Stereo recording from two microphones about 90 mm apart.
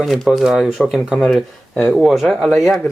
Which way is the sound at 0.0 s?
Centre (ahead or behind).